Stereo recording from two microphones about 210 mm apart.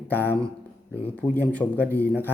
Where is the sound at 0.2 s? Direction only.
10° left (ahead or behind).